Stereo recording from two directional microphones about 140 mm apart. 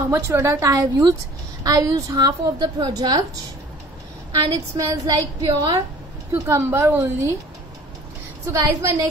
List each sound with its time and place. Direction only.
0.1 s a woman's voice: 20° right (ahead or behind)
4.7 s a woman's voice: 25° right (ahead or behind)
8.5 s a woman's voice: 25° right (ahead or behind)